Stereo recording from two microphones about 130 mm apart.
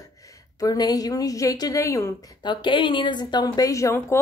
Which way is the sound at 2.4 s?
35° left (ahead or behind).